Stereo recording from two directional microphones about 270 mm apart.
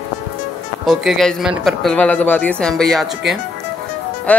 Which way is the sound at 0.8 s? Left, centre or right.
Centre.